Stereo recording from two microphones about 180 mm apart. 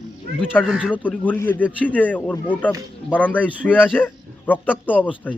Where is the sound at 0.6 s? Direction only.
Centre (ahead or behind).